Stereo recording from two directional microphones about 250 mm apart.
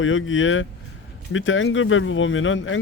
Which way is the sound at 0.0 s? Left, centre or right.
Left.